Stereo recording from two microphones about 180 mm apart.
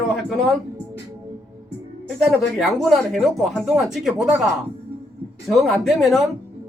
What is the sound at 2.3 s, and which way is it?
Speech, centre (ahead or behind).